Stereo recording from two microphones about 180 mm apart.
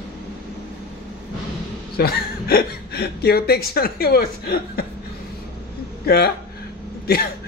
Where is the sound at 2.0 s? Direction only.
60° left (ahead or behind).